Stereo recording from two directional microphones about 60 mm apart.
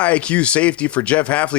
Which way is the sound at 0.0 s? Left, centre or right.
Left.